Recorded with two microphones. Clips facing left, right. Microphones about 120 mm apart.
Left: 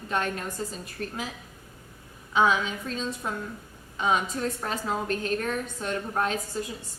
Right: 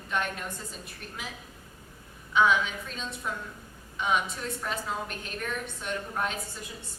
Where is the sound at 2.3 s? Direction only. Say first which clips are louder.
Left 1 dB; 35° left (ahead or behind).